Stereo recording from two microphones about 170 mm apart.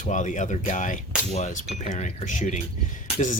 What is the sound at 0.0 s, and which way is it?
Speech, 45° left (ahead or behind).